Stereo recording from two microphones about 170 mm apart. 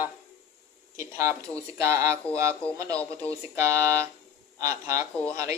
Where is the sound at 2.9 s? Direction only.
10° left (ahead or behind).